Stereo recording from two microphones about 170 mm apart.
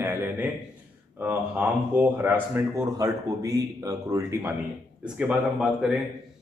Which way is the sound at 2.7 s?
20° right (ahead or behind).